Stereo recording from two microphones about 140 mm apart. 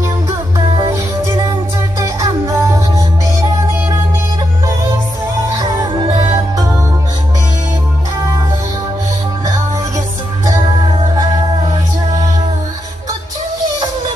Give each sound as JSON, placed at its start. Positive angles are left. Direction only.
{"t": 0.7, "sound": "music", "side_deg": -25}
{"t": 5.5, "sound": "music", "side_deg": -25}